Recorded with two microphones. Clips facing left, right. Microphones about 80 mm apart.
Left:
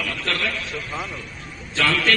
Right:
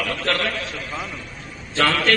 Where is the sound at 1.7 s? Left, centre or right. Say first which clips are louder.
Right 2 dB; right.